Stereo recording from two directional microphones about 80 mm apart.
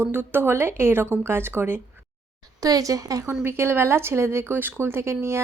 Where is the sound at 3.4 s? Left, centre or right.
Right.